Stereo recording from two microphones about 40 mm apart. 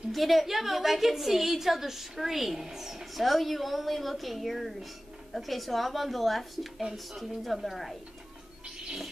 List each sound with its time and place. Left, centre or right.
0.1 s a woman's voice: centre
3.3 s a woman's voice: centre